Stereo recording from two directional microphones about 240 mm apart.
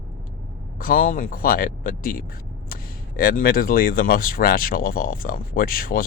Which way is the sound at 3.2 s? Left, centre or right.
Left.